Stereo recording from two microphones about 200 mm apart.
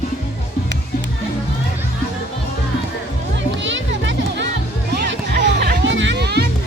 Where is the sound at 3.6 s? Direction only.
65° right (ahead or behind).